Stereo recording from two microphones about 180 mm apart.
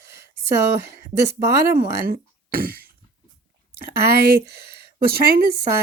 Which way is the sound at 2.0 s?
55° right (ahead or behind).